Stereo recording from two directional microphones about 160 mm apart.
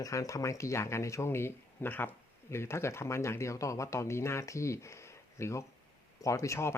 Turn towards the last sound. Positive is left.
turn(degrees=15)  # may be behind; listen again after turning